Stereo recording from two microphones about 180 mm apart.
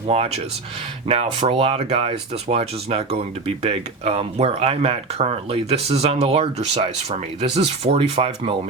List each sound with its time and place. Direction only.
0.1 s speech: 35° right (ahead or behind)